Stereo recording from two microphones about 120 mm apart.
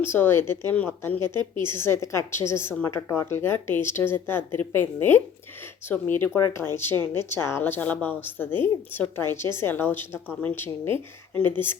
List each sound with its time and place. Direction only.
0.0 s speech: 20° left (ahead or behind)